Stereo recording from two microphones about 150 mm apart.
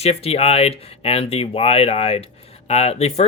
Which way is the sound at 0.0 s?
45° left (ahead or behind).